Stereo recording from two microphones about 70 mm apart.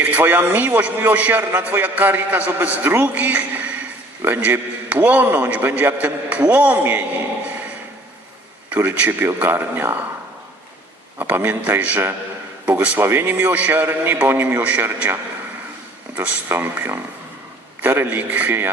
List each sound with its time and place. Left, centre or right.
0.1 s a man's voice: right
8.7 s a man's voice: right
11.2 s a man's voice: right
13.0 s a man's voice: right